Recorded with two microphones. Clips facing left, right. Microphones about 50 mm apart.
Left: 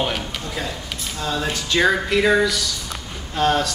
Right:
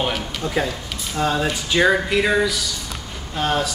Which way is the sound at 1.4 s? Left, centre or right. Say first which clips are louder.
Right 1 dB; centre.